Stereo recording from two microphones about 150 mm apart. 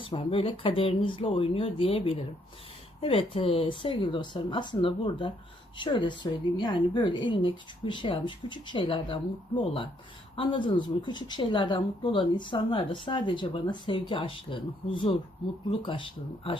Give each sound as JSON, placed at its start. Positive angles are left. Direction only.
{"t": 0.1, "sound": "speech", "side_deg": 40}
{"t": 10.3, "sound": "speech", "side_deg": 35}